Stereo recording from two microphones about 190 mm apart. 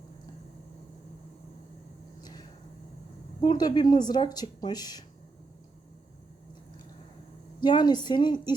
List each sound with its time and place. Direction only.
2.2 s a sound: 20° left (ahead or behind)
3.4 s speech: 20° left (ahead or behind)
7.6 s speech: 25° left (ahead or behind)